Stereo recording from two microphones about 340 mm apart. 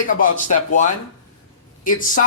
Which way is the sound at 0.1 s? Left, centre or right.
Left.